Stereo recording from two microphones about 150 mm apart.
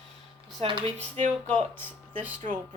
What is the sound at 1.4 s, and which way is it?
Speech, 10° left (ahead or behind).